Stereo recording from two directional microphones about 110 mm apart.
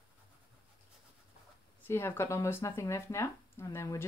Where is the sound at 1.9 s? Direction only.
20° left (ahead or behind).